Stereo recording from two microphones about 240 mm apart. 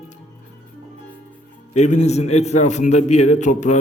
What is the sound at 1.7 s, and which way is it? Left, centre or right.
A man's voice, left.